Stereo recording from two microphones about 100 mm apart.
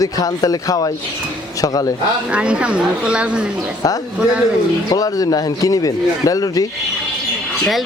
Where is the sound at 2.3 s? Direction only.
10° right (ahead or behind).